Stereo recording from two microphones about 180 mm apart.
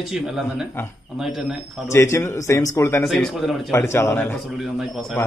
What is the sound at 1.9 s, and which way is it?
Speech, 15° left (ahead or behind).